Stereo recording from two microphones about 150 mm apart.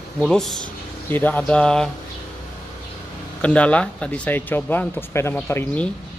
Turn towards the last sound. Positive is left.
turn(degrees=10)  # may be behind; listen again after turning